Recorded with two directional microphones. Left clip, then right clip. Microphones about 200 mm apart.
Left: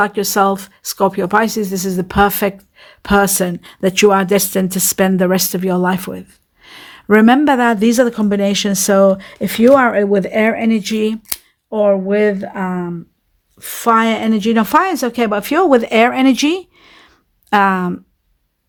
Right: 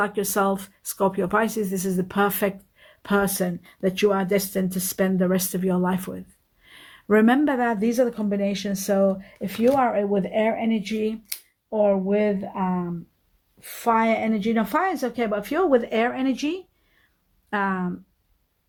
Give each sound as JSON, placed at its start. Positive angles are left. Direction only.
{"t": 0.0, "sound": "speech", "side_deg": 20}